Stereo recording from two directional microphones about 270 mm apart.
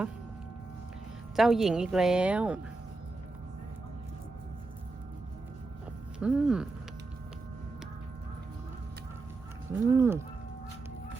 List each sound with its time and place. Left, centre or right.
1.4 s speech: centre
6.1 s speech: centre
9.7 s speech: centre